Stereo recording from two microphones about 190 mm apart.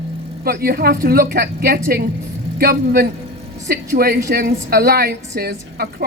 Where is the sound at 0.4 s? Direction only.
50° right (ahead or behind).